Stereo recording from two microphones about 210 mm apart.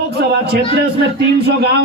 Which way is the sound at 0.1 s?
50° right (ahead or behind).